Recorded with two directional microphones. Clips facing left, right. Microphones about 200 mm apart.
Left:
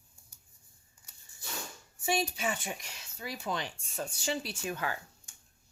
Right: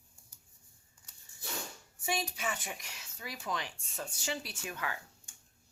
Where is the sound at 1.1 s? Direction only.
10° left (ahead or behind).